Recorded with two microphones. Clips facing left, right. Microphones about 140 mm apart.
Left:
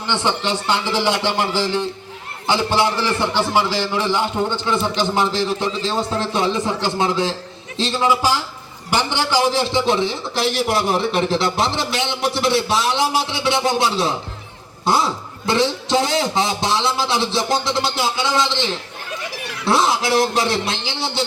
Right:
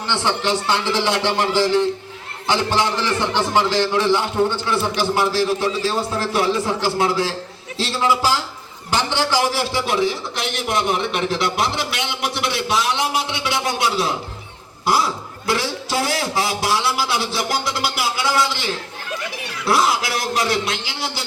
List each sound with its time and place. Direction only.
0.1 s speech: 15° left (ahead or behind)
3.5 s a man's voice: 15° left (ahead or behind)